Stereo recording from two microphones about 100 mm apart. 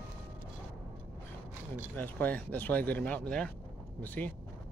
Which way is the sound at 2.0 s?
15° left (ahead or behind).